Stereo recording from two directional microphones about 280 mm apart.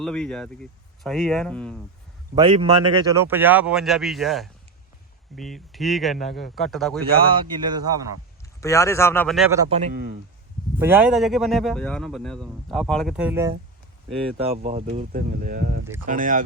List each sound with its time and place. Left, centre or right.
0.0 s speech: centre
2.3 s speech: centre
7.1 s speech: centre
8.6 s speech: centre
9.6 s a man's voice: right
10.8 s speech: centre
14.5 s a man's voice: right